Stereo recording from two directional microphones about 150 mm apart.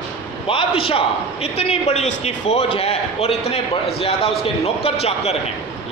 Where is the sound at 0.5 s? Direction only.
35° left (ahead or behind).